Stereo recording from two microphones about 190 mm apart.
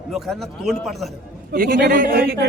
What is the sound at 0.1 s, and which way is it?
A man's voice, centre (ahead or behind).